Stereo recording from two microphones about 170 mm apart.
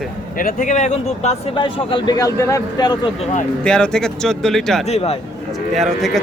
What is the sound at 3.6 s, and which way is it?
Speech, 5° left (ahead or behind).